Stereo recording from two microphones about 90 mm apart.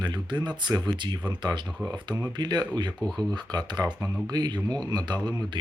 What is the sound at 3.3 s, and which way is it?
Speech, 50° right (ahead or behind).